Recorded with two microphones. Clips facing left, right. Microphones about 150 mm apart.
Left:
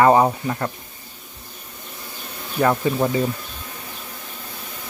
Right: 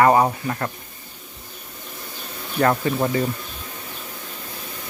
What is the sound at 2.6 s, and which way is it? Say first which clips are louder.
Speech: left 1 dB; 5° left (ahead or behind).